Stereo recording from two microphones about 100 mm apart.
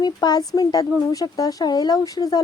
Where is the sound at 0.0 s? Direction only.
45° left (ahead or behind).